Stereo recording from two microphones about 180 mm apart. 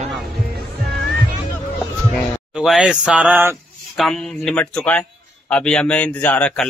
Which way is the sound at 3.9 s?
Centre (ahead or behind).